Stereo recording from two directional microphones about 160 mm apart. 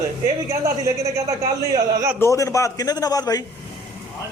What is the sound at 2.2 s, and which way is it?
A man's voice, 20° left (ahead or behind).